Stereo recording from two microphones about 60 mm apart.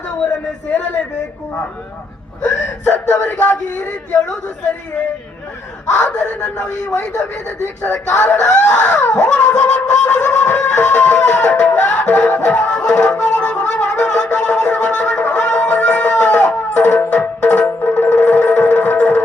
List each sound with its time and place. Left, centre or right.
2.6 s snicker: left
6.2 s snicker: centre
8.1 s snicker: left
12.7 s music: centre